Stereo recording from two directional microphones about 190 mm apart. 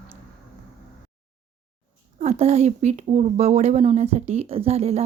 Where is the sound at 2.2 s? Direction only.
35° right (ahead or behind).